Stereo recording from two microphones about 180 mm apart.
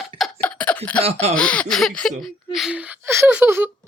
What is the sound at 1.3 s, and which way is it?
Speech, 5° left (ahead or behind).